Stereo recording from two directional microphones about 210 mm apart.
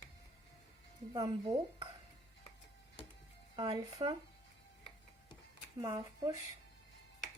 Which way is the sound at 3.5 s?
20° right (ahead or behind).